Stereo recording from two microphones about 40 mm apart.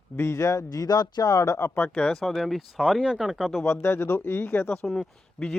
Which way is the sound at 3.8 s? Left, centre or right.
Left.